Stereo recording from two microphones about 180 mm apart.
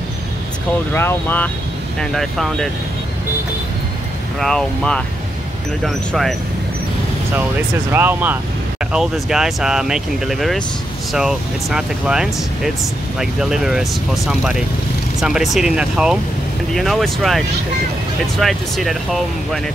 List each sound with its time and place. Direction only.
0.9 s speech: 10° left (ahead or behind)
4.4 s speech: 5° left (ahead or behind)
7.9 s speech: 10° right (ahead or behind)